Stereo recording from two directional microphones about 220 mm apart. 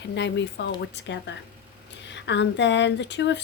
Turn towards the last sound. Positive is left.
turn(degrees=55)  # may be behind; listen again after turning